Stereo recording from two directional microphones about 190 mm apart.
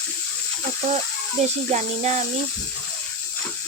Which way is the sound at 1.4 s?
35° right (ahead or behind).